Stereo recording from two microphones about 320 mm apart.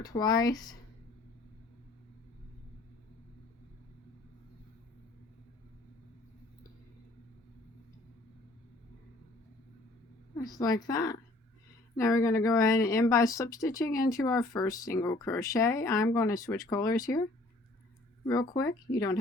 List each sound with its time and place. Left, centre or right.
0.0 s speech: centre
10.3 s speech: centre
18.3 s speech: centre